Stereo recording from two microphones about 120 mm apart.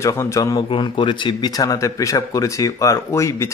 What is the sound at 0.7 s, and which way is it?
Speech, 45° left (ahead or behind).